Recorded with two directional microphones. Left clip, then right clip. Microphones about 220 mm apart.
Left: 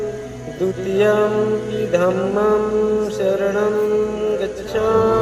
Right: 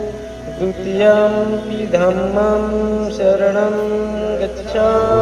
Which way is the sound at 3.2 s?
45° left (ahead or behind).